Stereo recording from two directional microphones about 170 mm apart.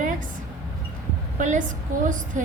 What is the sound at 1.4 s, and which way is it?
A woman's voice, 50° right (ahead or behind).